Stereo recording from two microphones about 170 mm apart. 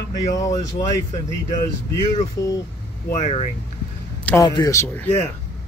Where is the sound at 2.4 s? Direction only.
20° left (ahead or behind).